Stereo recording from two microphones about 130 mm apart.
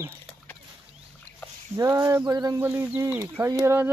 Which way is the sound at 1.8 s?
25° right (ahead or behind).